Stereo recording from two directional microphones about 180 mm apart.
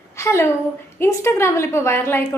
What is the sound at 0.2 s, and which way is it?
A woman's voice, 15° left (ahead or behind).